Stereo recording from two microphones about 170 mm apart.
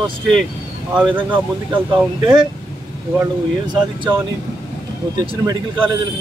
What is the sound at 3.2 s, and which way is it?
Speech, 25° right (ahead or behind).